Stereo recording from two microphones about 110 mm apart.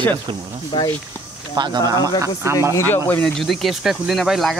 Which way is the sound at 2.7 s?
20° left (ahead or behind).